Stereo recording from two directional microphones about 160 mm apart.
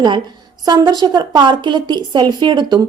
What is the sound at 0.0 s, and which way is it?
A woman's voice, 25° right (ahead or behind).